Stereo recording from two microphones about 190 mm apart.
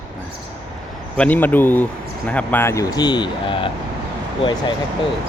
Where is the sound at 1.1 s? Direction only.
10° left (ahead or behind); by 3.7 s 25° left (ahead or behind).